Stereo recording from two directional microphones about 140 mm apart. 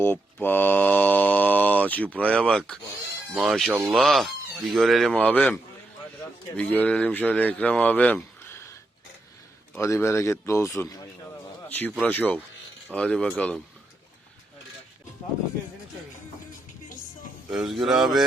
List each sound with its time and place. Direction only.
0.0 s mantra: 15° left (ahead or behind)
3.3 s speech: centre (ahead or behind)
6.6 s speech: 10° left (ahead or behind)
9.7 s speech: 20° left (ahead or behind)
11.7 s speech: 10° left (ahead or behind)
17.5 s speech: centre (ahead or behind)